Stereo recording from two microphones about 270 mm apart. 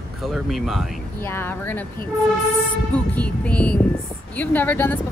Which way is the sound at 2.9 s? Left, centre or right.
Centre.